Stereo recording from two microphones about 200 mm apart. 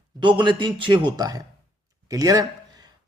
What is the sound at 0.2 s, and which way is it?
A man's voice, 25° right (ahead or behind).